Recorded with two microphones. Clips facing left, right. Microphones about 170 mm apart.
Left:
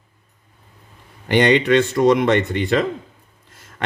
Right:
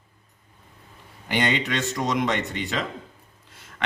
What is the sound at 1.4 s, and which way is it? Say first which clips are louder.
Speech: left 10 dB; 60° left (ahead or behind).